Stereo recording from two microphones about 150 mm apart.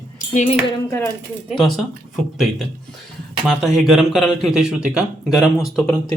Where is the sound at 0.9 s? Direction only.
15° left (ahead or behind).